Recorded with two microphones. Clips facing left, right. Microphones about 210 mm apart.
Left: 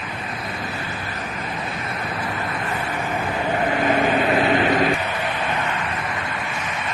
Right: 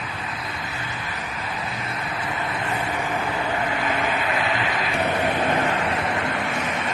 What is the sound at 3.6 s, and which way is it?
Vehicle, 45° left (ahead or behind).